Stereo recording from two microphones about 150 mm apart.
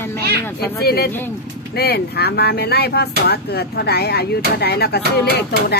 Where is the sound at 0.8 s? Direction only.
90° left.